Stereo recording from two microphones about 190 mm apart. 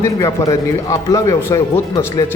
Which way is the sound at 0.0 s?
15° left (ahead or behind).